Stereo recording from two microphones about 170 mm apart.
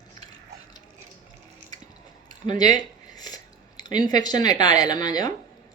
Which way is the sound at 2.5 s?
50° right (ahead or behind).